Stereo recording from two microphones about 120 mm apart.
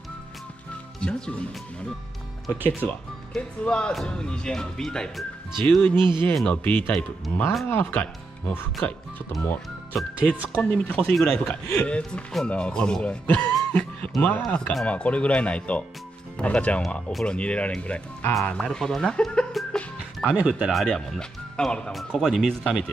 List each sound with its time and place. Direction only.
1.0 s speech: 10° left (ahead or behind)
2.5 s speech: 15° right (ahead or behind)
3.3 s speech: 5° left (ahead or behind)
5.9 s speech: 40° right (ahead or behind)
6.3 s speech: 10° left (ahead or behind)
10.6 s speech: 10° left (ahead or behind)
18.4 s music: 10° left (ahead or behind)
20.4 s speech: 5° right (ahead or behind)